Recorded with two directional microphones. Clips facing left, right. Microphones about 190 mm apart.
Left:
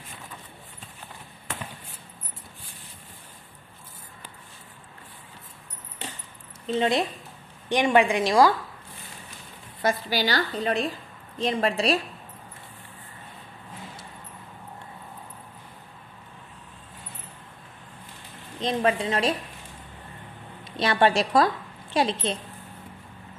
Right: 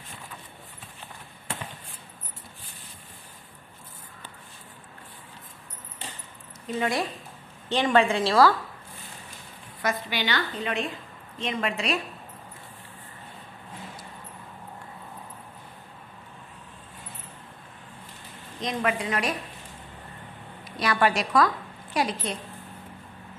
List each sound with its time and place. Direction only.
6.7 s a woman's voice: 25° left (ahead or behind)
10.0 s a woman's voice: 35° left (ahead or behind)
18.6 s a woman's voice: 30° left (ahead or behind)
20.6 s a woman's voice: 25° left (ahead or behind)